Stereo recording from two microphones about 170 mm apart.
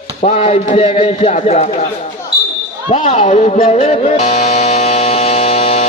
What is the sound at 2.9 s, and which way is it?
Music, 35° left (ahead or behind).